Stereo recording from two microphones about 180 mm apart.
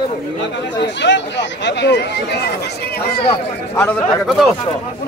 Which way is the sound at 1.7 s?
70° left (ahead or behind).